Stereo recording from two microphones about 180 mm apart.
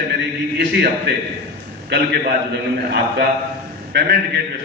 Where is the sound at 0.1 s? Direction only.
70° right (ahead or behind).